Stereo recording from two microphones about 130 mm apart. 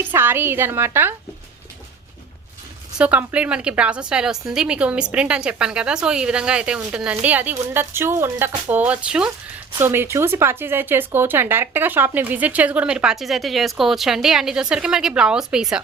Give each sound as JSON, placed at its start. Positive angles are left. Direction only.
{"t": 0.0, "sound": "speech", "side_deg": -15}
{"t": 3.0, "sound": "speech", "side_deg": -10}